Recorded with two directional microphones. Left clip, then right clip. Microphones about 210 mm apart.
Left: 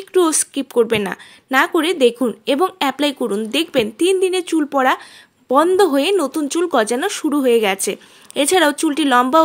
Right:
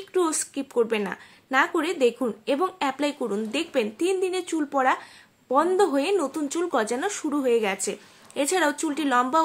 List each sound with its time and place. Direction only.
0.1 s a woman's voice: 40° left (ahead or behind)